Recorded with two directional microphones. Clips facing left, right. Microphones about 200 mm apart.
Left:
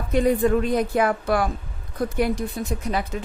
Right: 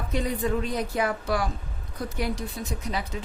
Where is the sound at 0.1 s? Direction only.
55° left (ahead or behind).